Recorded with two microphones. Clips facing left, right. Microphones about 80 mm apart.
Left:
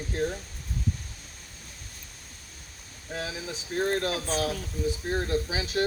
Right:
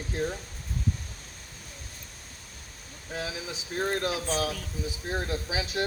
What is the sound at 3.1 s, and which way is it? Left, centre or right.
Speech, centre.